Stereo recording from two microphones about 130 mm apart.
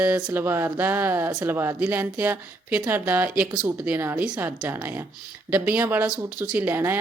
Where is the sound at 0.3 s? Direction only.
15° right (ahead or behind).